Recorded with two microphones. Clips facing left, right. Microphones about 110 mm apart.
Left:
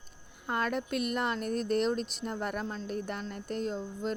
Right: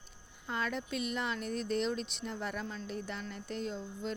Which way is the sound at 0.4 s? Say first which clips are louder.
Left 5 dB; 55° left (ahead or behind).